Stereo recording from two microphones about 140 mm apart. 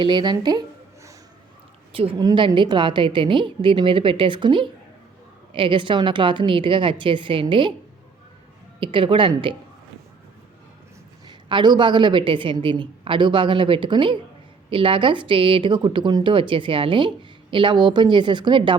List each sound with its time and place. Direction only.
0.0 s a woman's voice: 35° right (ahead or behind)
1.9 s a woman's voice: 40° right (ahead or behind)
8.8 s a woman's voice: 40° right (ahead or behind)
11.3 s a woman's voice: 35° right (ahead or behind)